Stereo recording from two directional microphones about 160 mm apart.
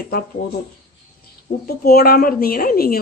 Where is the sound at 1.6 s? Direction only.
75° left (ahead or behind).